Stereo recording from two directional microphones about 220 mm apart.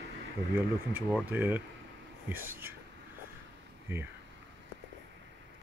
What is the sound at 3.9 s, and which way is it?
Speech, 10° right (ahead or behind).